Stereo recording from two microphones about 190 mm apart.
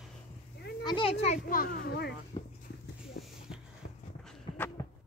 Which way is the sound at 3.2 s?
60° left (ahead or behind).